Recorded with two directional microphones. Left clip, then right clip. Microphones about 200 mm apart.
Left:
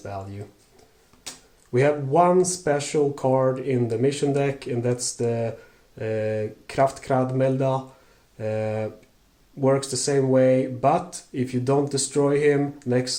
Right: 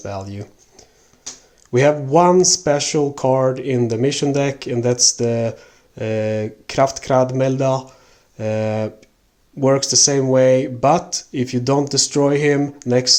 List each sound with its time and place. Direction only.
0.0 s speech: 40° right (ahead or behind)
1.7 s speech: 35° right (ahead or behind)